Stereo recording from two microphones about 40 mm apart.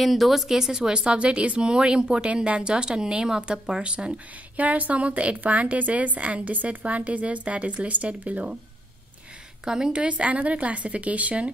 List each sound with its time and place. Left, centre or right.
0.0 s speech: centre; by 4.1 s right
4.6 s a woman's voice: right
9.7 s a woman's voice: centre
9.9 s a woman's voice: right